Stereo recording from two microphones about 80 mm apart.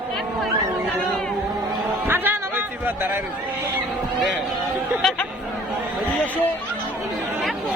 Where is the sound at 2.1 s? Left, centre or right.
Right.